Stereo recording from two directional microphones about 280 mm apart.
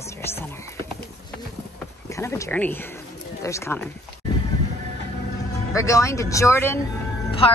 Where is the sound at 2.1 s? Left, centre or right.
Centre.